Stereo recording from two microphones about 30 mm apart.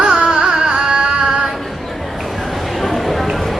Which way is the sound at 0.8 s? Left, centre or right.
Right.